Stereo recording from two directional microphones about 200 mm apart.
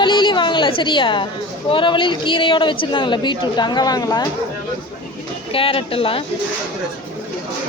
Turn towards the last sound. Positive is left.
turn(degrees=30)  # may be behind; listen again after turning